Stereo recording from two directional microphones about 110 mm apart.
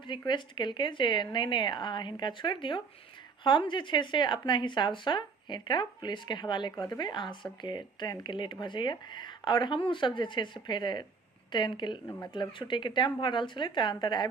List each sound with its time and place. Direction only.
0.0 s speech: 45° left (ahead or behind)